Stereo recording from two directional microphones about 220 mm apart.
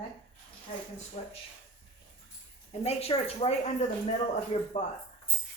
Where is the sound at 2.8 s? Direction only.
30° left (ahead or behind).